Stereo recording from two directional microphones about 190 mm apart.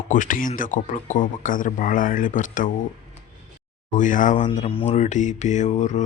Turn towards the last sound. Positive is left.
turn(degrees=40)  # may be behind; listen again after turning